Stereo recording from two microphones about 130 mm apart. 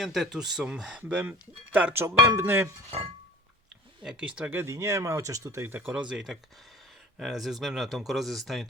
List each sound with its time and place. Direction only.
0.0 s speech: centre (ahead or behind); by 2.7 s 20° right (ahead or behind)
4.0 s speech: 10° right (ahead or behind)